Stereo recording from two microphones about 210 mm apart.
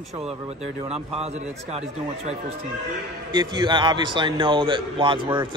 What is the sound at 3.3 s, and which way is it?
A man's voice, 20° right (ahead or behind).